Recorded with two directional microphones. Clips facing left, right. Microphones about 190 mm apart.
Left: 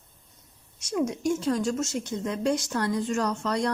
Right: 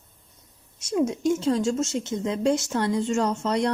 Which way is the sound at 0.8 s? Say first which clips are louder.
Right 3 dB; 25° right (ahead or behind).